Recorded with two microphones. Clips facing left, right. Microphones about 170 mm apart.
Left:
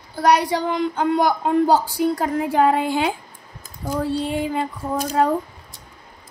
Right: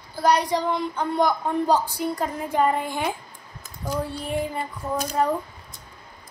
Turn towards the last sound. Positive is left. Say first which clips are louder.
# left 4 dB
turn(degrees=90)